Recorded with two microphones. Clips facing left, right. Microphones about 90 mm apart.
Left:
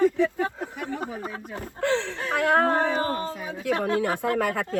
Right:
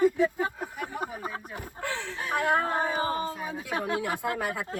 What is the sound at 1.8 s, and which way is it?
Speech, 70° left (ahead or behind).